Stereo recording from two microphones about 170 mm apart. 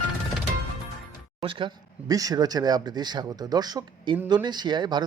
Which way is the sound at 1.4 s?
30° right (ahead or behind).